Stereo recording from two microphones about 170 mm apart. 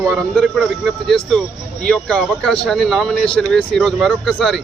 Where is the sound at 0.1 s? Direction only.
5° left (ahead or behind).